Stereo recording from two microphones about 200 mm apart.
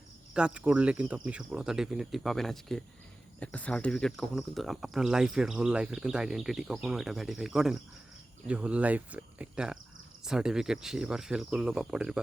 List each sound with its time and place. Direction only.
0.3 s speech: 5° right (ahead or behind)